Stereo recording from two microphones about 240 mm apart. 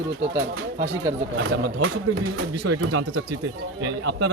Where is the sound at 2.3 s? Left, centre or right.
Right.